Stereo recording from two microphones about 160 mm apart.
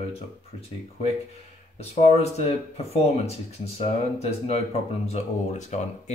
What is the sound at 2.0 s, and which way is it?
Speech, 40° left (ahead or behind).